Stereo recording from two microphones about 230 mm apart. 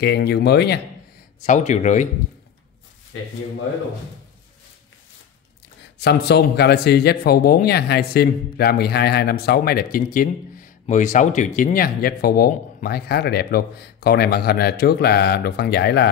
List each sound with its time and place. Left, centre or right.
0.0 s speech: left
1.4 s speech: left
5.9 s speech: left